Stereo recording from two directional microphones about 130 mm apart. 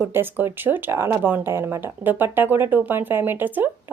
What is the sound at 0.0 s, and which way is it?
Speech, 15° right (ahead or behind).